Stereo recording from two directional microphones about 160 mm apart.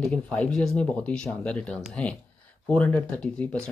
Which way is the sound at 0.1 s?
5° left (ahead or behind).